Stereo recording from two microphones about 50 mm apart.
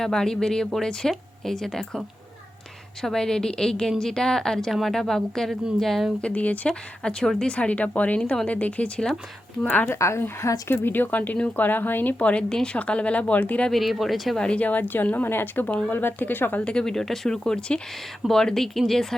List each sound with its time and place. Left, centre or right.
0.0 s a woman's voice: centre
6.2 s speech: left
6.7 s a woman's voice: centre; by 9.9 s left
9.9 s speech: left
12.2 s a woman's voice: left
13.7 s speech: centre
14.3 s a woman's voice: left
16.6 s a woman's voice: left
16.8 s a woman's voice: centre